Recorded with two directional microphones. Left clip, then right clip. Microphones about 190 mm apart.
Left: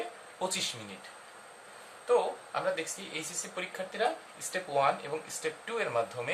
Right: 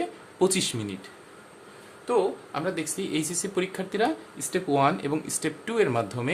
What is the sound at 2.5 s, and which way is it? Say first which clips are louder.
Speech: right 2 dB; 50° right (ahead or behind).